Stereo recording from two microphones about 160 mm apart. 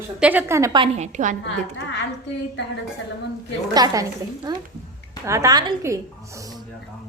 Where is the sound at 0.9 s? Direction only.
45° right (ahead or behind).